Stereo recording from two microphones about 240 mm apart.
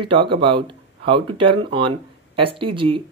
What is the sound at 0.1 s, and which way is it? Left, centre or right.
Speech, right.